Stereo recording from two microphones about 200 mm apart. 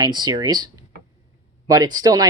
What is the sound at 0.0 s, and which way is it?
Speech, 20° right (ahead or behind).